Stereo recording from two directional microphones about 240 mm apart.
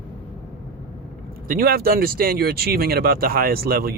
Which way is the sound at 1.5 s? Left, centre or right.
Right.